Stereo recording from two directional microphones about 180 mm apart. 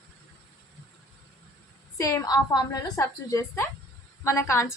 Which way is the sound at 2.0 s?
20° left (ahead or behind).